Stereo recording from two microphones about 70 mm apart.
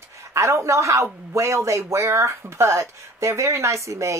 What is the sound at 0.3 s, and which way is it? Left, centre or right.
A woman's voice, right.